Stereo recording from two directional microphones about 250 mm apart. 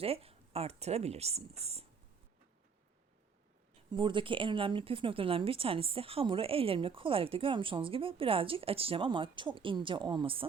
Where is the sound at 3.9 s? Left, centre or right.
Centre.